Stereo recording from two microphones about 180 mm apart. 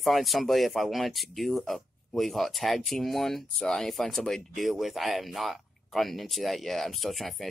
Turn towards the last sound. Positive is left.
turn(degrees=0)  # may be behind; listen again after turning